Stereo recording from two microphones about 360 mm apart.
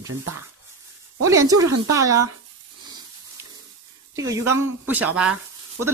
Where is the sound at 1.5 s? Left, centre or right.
Right.